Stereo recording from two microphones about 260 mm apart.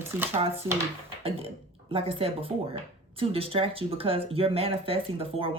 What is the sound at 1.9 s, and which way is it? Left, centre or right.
Speech, right.